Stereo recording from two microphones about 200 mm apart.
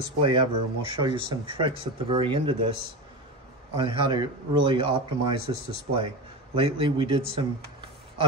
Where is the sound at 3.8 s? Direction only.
25° right (ahead or behind).